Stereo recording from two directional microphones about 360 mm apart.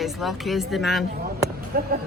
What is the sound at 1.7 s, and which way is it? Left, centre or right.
Speech, right.